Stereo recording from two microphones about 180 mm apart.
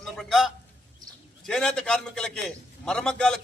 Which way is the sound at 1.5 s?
5° left (ahead or behind).